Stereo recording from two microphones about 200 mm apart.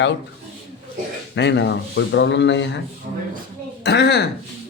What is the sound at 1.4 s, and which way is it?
Speech, 60° left (ahead or behind).